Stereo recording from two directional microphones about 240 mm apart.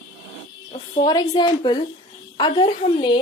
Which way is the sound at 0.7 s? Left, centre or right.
Centre.